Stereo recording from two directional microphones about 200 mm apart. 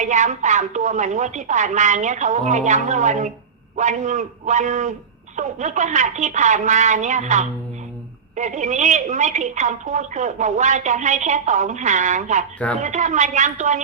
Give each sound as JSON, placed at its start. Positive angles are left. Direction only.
{"t": 0.0, "sound": "a woman's voice", "side_deg": -35}